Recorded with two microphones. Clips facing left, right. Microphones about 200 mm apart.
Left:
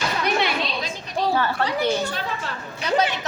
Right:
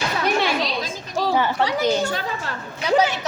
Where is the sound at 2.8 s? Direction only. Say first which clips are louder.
Right 3 dB; 10° right (ahead or behind).